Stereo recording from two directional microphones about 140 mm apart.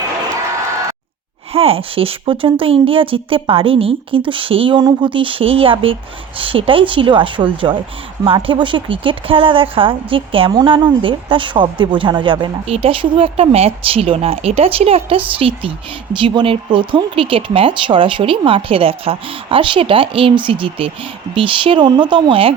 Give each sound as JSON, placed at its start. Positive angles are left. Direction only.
{"t": 1.5, "sound": "speech", "side_deg": -45}